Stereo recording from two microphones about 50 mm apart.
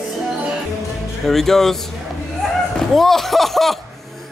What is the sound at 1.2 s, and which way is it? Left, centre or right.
Speech, centre.